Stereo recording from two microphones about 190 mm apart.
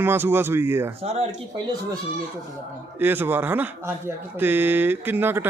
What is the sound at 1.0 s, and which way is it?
Speech, 30° right (ahead or behind).